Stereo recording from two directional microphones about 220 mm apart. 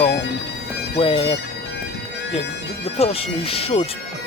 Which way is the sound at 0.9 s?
25° left (ahead or behind).